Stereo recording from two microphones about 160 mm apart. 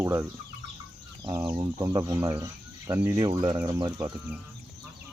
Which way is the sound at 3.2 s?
30° right (ahead or behind).